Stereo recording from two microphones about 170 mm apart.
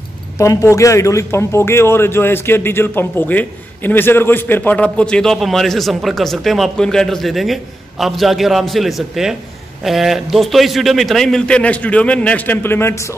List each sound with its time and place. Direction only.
0.4 s a man's voice: 20° left (ahead or behind)